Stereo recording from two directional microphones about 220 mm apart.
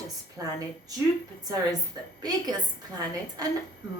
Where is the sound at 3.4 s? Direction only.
15° right (ahead or behind).